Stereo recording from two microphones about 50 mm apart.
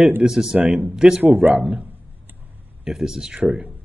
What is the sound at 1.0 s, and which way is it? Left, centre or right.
Speech, centre.